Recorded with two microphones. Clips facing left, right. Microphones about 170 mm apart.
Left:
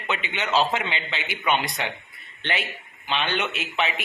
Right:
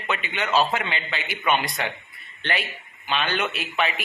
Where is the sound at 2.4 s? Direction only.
20° left (ahead or behind).